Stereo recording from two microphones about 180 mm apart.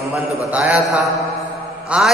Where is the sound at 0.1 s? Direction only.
5° right (ahead or behind).